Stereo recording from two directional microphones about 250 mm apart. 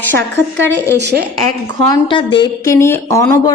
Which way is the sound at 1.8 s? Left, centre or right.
Centre.